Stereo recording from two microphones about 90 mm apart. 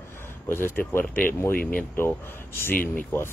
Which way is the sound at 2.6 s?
30° left (ahead or behind).